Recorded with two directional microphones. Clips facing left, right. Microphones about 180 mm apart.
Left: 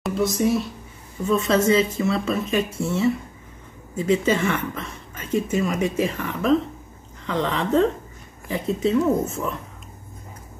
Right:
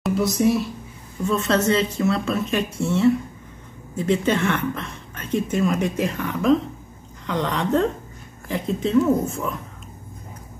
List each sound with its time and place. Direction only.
0.0 s a woman's voice: centre (ahead or behind)